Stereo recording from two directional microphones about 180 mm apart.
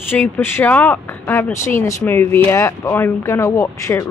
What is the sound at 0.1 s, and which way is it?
Speech, 10° left (ahead or behind).